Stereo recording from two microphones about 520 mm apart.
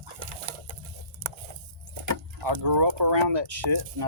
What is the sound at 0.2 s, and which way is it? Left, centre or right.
Pigeon, right.